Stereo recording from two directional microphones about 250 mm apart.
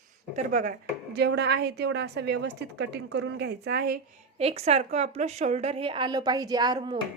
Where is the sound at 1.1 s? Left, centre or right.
Right.